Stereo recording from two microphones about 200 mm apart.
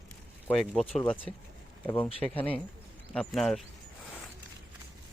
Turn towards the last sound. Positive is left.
turn(degrees=0)  # may be behind; listen again after turning